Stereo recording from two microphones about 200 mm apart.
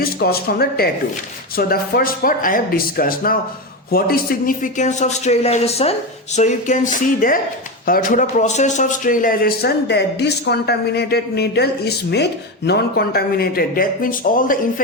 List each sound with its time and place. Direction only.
0.0 s a man's voice: 50° left (ahead or behind)